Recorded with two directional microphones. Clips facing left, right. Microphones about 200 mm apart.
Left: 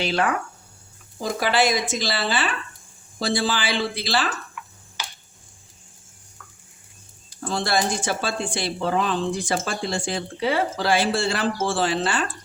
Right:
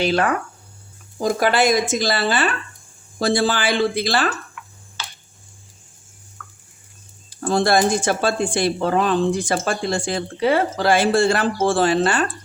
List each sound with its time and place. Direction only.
0.0 s speech: 45° right (ahead or behind)
5.0 s a sound: 15° left (ahead or behind)
7.4 s speech: 50° right (ahead or behind)